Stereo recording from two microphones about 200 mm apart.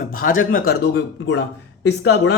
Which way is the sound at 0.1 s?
45° left (ahead or behind).